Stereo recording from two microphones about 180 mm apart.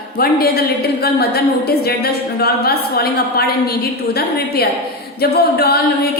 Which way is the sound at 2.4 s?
60° left (ahead or behind).